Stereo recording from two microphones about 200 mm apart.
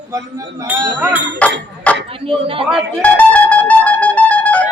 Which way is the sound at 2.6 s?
Centre (ahead or behind).